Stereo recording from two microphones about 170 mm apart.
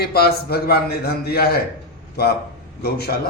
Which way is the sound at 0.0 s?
70° left (ahead or behind).